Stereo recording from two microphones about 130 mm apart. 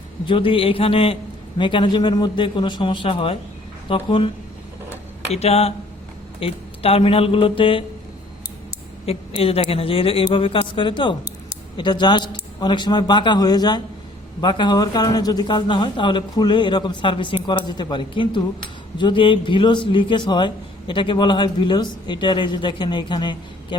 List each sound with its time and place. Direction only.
0.3 s a man's voice: 40° left (ahead or behind)
5.3 s speech: 55° left (ahead or behind)
9.0 s a man's voice: 50° left (ahead or behind)